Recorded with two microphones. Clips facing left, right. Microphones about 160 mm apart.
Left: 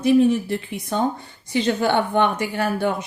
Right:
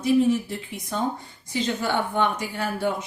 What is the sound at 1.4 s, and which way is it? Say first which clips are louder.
Speech: left 6 dB; 70° left (ahead or behind).